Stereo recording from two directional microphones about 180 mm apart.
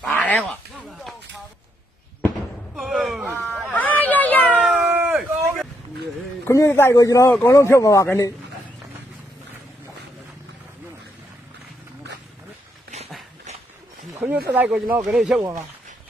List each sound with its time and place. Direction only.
0.1 s speech: 10° left (ahead or behind)
2.7 s a sound: centre (ahead or behind)
6.5 s a man's voice: 15° left (ahead or behind)
14.1 s a sound: 10° right (ahead or behind)
14.4 s speech: 10° right (ahead or behind)
15.4 s speech: 20° right (ahead or behind)